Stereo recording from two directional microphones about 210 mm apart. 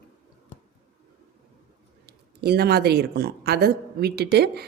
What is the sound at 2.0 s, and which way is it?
Speech, 50° right (ahead or behind).